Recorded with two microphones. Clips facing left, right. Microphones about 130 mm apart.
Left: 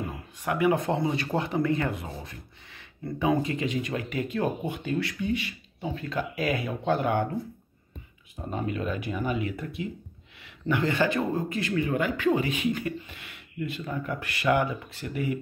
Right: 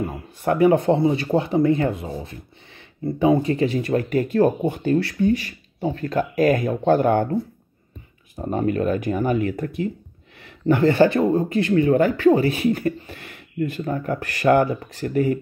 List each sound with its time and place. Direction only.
0.4 s speech: 35° right (ahead or behind)
8.4 s speech: 50° right (ahead or behind); by 11.7 s 30° right (ahead or behind)
11.7 s speech: 40° right (ahead or behind)